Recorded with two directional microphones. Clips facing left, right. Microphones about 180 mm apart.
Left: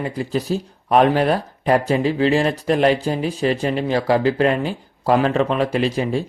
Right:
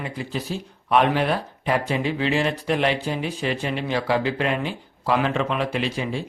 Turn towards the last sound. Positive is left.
turn(degrees=40)  # may be behind; listen again after turning